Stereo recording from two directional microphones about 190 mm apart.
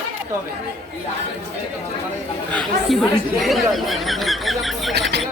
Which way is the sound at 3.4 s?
Centre (ahead or behind).